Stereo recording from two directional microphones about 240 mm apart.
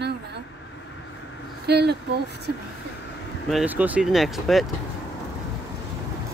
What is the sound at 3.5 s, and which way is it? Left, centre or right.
Speech, centre.